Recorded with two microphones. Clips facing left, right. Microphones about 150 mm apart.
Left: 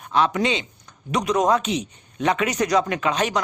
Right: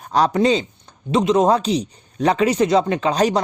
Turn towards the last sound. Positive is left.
turn(degrees=-35)  # may be behind; listen again after turning